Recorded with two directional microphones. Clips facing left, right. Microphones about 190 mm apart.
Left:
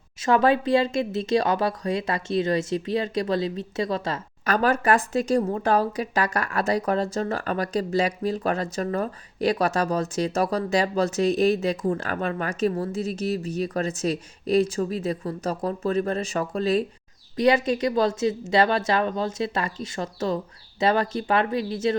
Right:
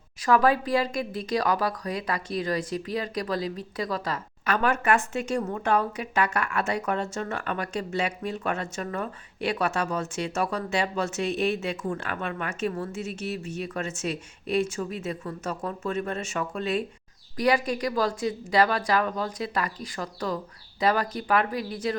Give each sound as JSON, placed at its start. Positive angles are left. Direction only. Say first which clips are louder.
{"t": 0.2, "sound": "a woman's voice", "louder": "left 2 dB", "side_deg": 25}
{"t": 4.4, "sound": "speech", "louder": "left 3 dB", "side_deg": 35}
{"t": 17.3, "sound": "a woman's voice", "louder": "left 4 dB", "side_deg": 25}